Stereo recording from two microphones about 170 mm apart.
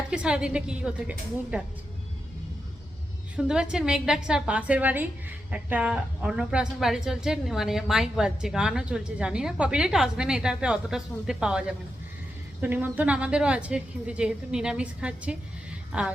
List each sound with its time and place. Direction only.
0.1 s a woman's voice: 5° right (ahead or behind)
3.3 s a woman's voice: 5° right (ahead or behind)
12.6 s a woman's voice: 10° right (ahead or behind)